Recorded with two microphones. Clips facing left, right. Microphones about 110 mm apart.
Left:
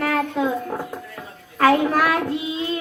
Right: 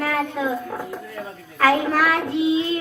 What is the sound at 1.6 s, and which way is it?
Speech, 15° left (ahead or behind).